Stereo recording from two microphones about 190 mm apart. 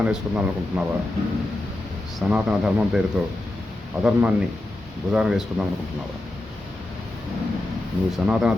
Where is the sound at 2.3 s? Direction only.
5° right (ahead or behind).